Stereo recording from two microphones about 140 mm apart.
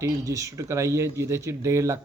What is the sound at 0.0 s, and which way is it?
Speech, 20° right (ahead or behind).